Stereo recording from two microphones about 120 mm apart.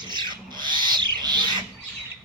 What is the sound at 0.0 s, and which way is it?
Owl, 40° right (ahead or behind).